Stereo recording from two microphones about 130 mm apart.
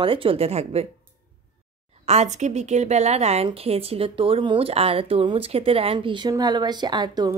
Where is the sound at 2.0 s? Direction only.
60° right (ahead or behind).